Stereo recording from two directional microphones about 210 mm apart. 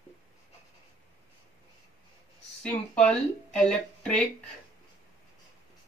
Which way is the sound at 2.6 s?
5° left (ahead or behind).